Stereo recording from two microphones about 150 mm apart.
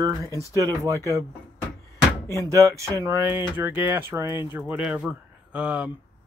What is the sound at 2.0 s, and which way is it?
Door, 20° left (ahead or behind).